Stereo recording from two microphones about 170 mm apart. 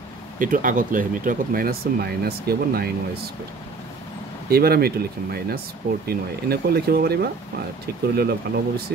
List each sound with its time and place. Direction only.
0.4 s speech: 50° right (ahead or behind)
4.5 s speech: 65° right (ahead or behind)